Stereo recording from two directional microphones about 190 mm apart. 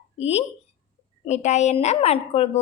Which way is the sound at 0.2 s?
35° left (ahead or behind).